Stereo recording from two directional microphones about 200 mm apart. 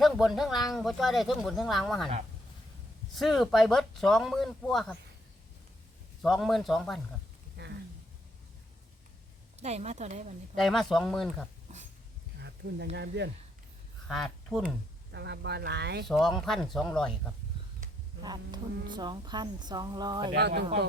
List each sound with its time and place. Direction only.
0.0 s speech: centre (ahead or behind)
3.2 s speech: centre (ahead or behind)
6.2 s speech: centre (ahead or behind)
7.6 s a sound: 55° right (ahead or behind)
9.6 s a woman's voice: 35° right (ahead or behind)
10.5 s speech: centre (ahead or behind)
12.4 s speech: 60° right (ahead or behind)
14.1 s speech: centre (ahead or behind)
15.1 s speech: 60° right (ahead or behind)
16.0 s speech: centre (ahead or behind)
18.2 s speech: 20° right (ahead or behind)
20.3 s speech: 55° right (ahead or behind)